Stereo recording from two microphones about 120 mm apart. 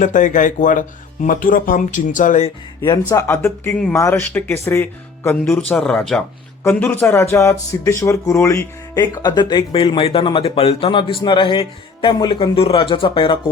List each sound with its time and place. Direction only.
0.0 s speech: 90° left
3.1 s speech: 25° left (ahead or behind); by 13.4 s 45° left (ahead or behind)